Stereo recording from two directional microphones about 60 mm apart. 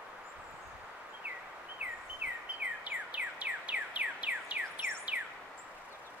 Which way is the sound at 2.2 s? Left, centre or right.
Right.